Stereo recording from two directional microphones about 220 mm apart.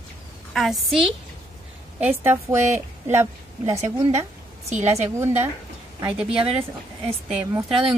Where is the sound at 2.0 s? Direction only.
10° right (ahead or behind).